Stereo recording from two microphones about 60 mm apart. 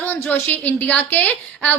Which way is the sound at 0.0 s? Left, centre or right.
Left.